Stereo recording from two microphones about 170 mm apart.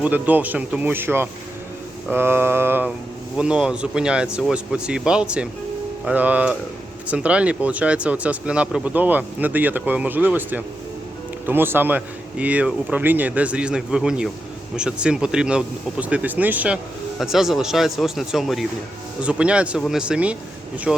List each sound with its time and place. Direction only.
0.0 s speech: 10° right (ahead or behind)